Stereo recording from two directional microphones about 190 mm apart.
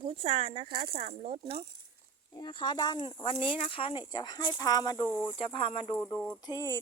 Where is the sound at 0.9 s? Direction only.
30° right (ahead or behind).